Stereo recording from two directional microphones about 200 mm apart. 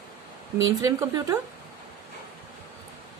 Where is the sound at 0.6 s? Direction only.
15° right (ahead or behind).